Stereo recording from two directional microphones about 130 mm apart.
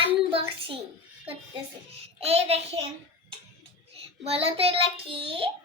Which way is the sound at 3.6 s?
50° right (ahead or behind).